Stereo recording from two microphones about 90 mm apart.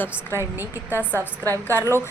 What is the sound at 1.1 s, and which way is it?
Speech, 40° right (ahead or behind).